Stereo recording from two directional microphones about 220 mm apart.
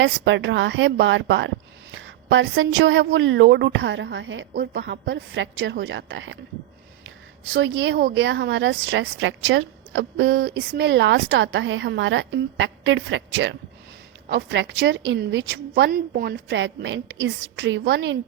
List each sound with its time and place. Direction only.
0.0 s a woman's voice: 55° right (ahead or behind)
7.5 s a woman's voice: 55° right (ahead or behind)